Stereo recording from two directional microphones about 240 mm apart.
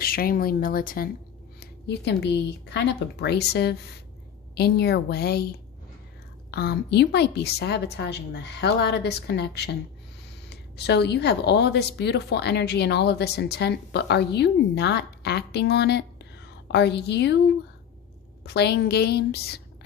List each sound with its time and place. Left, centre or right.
0.0 s speech: left
18.4 s speech: left